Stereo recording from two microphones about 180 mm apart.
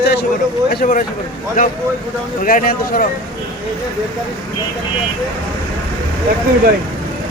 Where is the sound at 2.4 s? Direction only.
50° left (ahead or behind).